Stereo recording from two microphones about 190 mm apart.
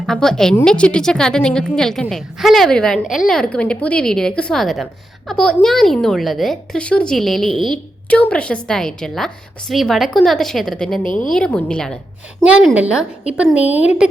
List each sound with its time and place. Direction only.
0.0 s a woman's voice: centre (ahead or behind)
11.0 s a woman's voice: 45° left (ahead or behind)
11.3 s a woman's voice: 5° left (ahead or behind)
12.5 s a woman's voice: 5° right (ahead or behind)